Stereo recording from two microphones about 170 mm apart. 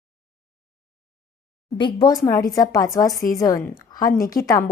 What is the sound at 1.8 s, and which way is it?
A woman's voice, 20° left (ahead or behind).